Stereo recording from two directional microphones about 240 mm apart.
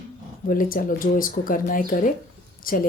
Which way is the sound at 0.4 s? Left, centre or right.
Left.